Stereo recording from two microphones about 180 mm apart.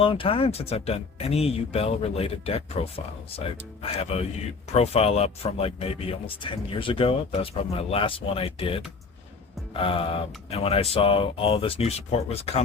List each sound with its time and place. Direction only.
0.0 s speech: 30° left (ahead or behind)